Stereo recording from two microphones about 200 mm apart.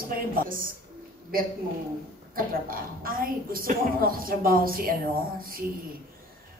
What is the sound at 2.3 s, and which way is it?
A woman's voice, 45° right (ahead or behind).